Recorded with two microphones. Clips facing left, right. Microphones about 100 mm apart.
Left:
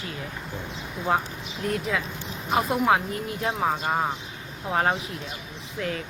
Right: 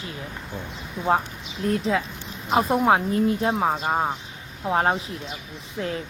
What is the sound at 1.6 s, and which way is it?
Speech, 30° right (ahead or behind).